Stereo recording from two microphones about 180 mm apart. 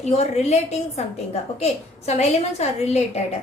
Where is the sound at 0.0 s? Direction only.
35° left (ahead or behind).